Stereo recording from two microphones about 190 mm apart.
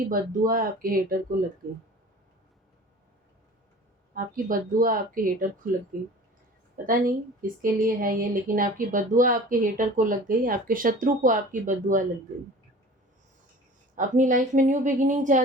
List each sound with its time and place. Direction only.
0.1 s a woman's voice: 50° right (ahead or behind)
4.1 s a woman's voice: 45° right (ahead or behind)
13.9 s a woman's voice: 45° right (ahead or behind)